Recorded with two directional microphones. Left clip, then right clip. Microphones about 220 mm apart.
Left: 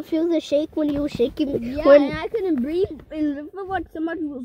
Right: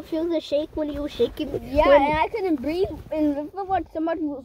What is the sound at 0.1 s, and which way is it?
Speech, 25° left (ahead or behind).